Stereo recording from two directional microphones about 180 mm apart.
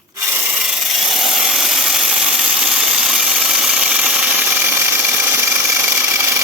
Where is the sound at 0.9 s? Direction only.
Centre (ahead or behind).